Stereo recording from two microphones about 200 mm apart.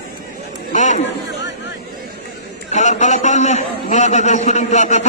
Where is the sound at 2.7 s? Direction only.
35° left (ahead or behind).